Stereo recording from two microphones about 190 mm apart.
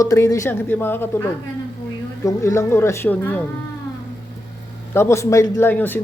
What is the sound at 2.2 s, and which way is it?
Speech, 15° left (ahead or behind).